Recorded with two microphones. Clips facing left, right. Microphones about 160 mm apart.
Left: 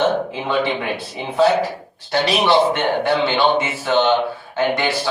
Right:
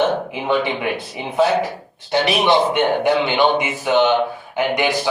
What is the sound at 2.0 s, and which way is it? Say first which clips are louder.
A man's voice: right 1 dB; 20° right (ahead or behind).